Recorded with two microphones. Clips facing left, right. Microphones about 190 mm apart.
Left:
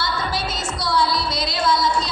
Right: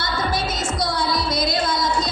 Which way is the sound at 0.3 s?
20° right (ahead or behind).